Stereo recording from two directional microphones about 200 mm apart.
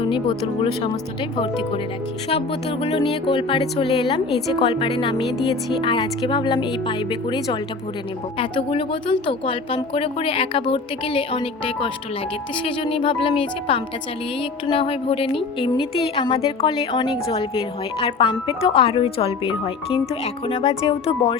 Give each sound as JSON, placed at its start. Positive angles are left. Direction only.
{"t": 0.1, "sound": "speech", "side_deg": 25}
{"t": 8.4, "sound": "speech", "side_deg": 25}